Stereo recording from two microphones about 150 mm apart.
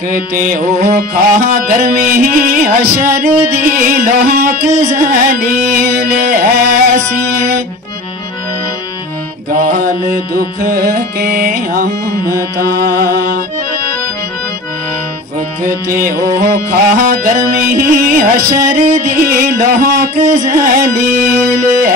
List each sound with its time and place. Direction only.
0.1 s music: 65° right (ahead or behind)
4.7 s music: 55° right (ahead or behind)
9.5 s music: 70° right (ahead or behind)
12.5 s music: 90° right
15.9 s music: 75° right (ahead or behind)